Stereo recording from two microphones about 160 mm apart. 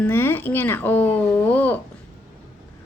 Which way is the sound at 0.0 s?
15° left (ahead or behind).